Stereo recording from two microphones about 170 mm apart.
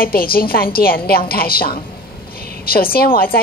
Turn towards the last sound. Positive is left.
turn(degrees=60)  # may be behind; listen again after turning